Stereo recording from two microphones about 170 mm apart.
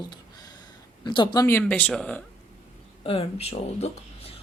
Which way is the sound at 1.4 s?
10° left (ahead or behind).